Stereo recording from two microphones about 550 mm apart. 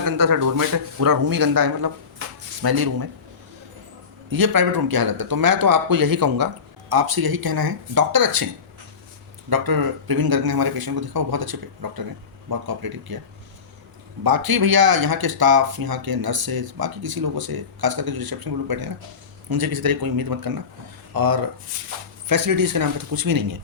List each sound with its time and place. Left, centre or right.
0.0 s speech: right
4.3 s speech: right
9.5 s speech: right
14.3 s speech: right